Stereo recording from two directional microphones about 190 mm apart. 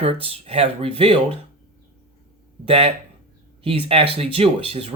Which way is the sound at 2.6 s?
30° right (ahead or behind).